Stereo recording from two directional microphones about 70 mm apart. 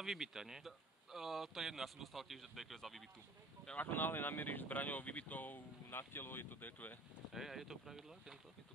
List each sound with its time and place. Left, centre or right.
0.0 s speech: centre
3.7 s speech: left
7.3 s speech: centre